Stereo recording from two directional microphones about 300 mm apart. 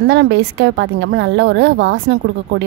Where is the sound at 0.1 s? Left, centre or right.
Right.